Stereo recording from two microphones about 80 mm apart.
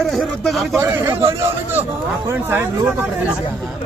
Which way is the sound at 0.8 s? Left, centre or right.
Right.